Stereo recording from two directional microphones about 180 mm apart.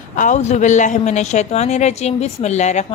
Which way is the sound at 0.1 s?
45° left (ahead or behind).